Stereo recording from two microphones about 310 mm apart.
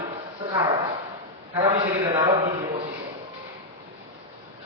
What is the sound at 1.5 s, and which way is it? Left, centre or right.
A man's voice, centre.